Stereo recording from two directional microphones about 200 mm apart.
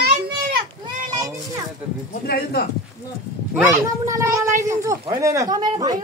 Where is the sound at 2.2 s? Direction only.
50° left (ahead or behind).